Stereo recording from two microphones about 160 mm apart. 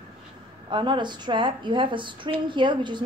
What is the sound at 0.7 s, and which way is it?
A woman's voice, 30° right (ahead or behind).